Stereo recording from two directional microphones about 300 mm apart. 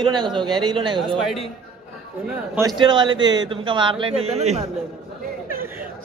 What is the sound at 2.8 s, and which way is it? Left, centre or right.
A man's voice, centre.